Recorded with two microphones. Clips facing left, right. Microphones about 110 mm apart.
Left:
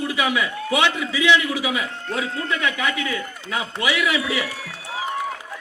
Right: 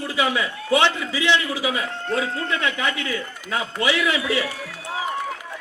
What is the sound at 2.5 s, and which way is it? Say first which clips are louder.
A man's voice: left 1 dB; 35° right (ahead or behind).